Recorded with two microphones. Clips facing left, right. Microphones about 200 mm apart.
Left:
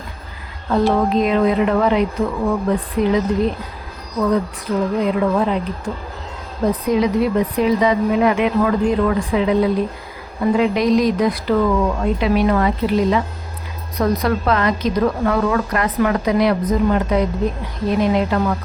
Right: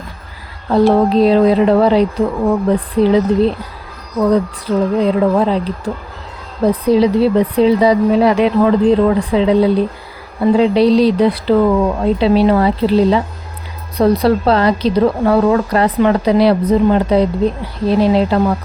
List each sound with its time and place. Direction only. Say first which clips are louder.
0.7 s a woman's voice: right 5 dB; 35° right (ahead or behind)
6.8 s a woman's voice: right 6 dB; 30° right (ahead or behind)